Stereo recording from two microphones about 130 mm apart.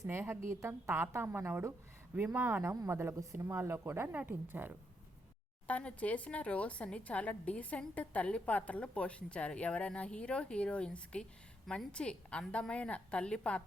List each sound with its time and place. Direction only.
0.0 s a woman's voice: 20° right (ahead or behind)
5.6 s speech: 10° left (ahead or behind)